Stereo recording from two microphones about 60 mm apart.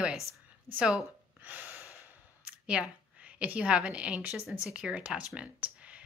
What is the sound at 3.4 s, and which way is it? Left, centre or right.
Speech, right.